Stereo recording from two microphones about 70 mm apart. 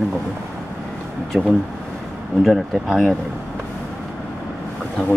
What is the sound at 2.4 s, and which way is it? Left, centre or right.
Speech, centre.